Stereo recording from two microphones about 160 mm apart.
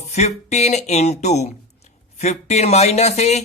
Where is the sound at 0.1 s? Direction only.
45° left (ahead or behind).